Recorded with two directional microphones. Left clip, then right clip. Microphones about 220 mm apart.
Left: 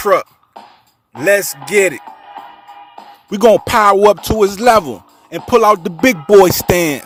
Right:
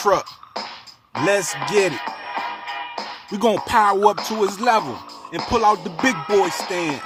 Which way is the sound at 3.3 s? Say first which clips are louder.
Left 8 dB; 25° left (ahead or behind).